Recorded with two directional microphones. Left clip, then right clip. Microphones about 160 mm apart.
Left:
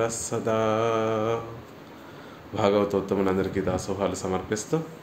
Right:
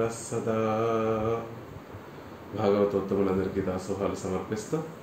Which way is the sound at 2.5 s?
50° left (ahead or behind).